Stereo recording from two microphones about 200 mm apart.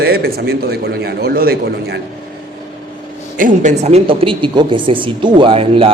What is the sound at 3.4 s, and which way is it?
A woman's voice, 35° right (ahead or behind).